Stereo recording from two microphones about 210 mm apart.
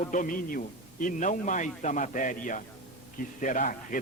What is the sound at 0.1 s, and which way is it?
A man's voice, 40° left (ahead or behind).